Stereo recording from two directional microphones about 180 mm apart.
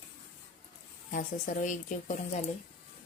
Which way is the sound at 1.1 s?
50° left (ahead or behind).